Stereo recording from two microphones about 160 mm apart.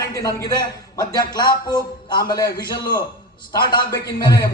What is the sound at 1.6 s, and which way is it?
A man's voice, 25° left (ahead or behind).